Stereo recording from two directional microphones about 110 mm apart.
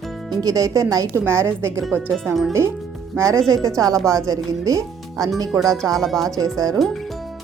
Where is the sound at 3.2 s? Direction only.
25° right (ahead or behind).